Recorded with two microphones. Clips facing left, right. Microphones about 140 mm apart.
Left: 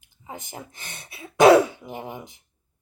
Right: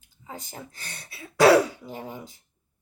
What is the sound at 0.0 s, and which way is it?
Speech, 20° left (ahead or behind).